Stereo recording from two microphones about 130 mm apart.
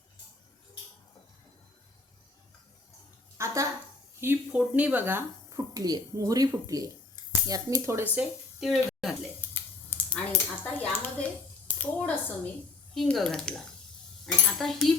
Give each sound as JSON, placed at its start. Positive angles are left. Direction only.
{"t": 3.3, "sound": "a sound", "side_deg": -20}
{"t": 4.2, "sound": "speech", "side_deg": -15}
{"t": 5.5, "sound": "speech", "side_deg": -30}
{"t": 9.9, "sound": "typing", "side_deg": 10}
{"t": 11.8, "sound": "a woman's voice", "side_deg": 10}